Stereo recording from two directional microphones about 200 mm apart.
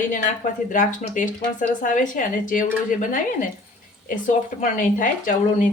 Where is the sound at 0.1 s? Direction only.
40° left (ahead or behind).